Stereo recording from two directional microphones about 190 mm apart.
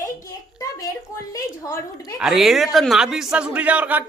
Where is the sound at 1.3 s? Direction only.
15° left (ahead or behind).